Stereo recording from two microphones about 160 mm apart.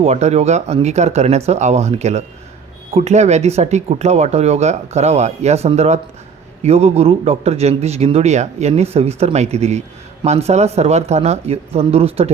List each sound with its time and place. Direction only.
0.0 s a man's voice: 40° right (ahead or behind)